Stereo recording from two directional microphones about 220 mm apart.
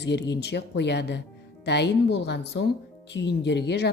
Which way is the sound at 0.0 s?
50° left (ahead or behind).